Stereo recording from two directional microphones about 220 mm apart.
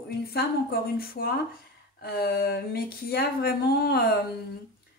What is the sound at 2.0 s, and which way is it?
Speech, 45° left (ahead or behind).